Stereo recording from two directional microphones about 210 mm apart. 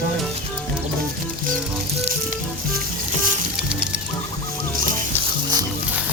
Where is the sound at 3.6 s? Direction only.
5° right (ahead or behind).